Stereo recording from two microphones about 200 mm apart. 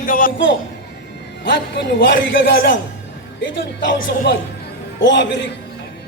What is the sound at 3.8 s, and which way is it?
A man's voice, 65° left (ahead or behind).